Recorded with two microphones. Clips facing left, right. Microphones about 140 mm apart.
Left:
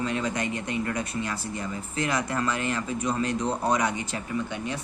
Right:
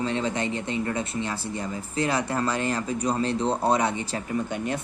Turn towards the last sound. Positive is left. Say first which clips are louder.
# right 4 dB
turn(degrees=-50)  # may be behind; listen again after turning